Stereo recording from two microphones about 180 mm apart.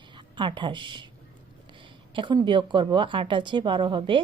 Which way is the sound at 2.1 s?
25° right (ahead or behind).